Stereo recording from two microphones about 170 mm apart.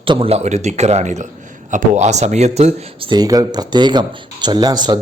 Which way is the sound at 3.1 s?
20° right (ahead or behind).